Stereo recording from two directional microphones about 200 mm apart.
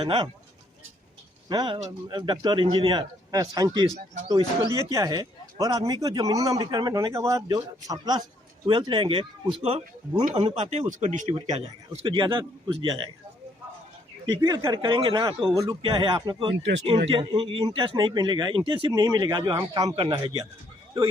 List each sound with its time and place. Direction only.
0.0 s speech: 25° right (ahead or behind)
1.5 s speech: 20° right (ahead or behind); by 11.3 s 35° right (ahead or behind)
11.3 s speech: 25° right (ahead or behind)
14.4 s speech: 20° right (ahead or behind)